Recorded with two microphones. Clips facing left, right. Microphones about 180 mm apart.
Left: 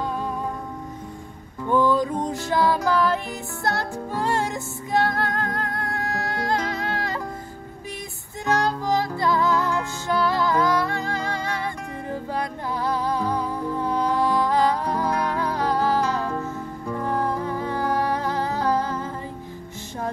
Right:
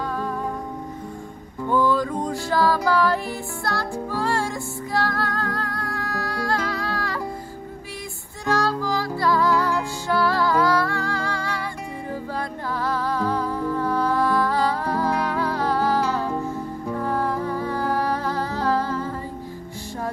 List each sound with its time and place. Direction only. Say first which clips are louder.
1.7 s music: left 1 dB; 20° left (ahead or behind)
8.5 s music: left 1 dB; 20° left (ahead or behind)
16.0 s music: right 1 dB; 10° right (ahead or behind)
17.0 s music: even; 20° left (ahead or behind)